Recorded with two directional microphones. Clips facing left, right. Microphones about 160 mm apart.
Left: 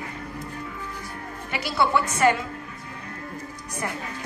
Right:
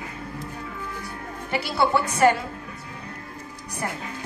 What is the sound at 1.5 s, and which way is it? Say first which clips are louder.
Speech: right 1 dB; 30° right (ahead or behind).